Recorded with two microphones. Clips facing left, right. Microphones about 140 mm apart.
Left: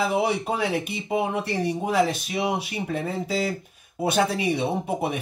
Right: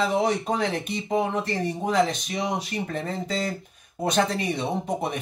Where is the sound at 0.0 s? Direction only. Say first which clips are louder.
Even; 10° left (ahead or behind).